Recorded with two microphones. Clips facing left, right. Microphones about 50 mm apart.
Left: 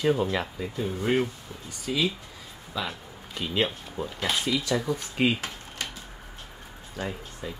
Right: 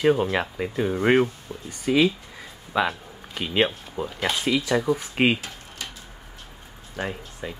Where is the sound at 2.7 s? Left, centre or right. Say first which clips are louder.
Right 9 dB; right.